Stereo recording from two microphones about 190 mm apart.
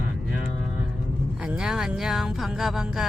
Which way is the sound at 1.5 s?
5° right (ahead or behind).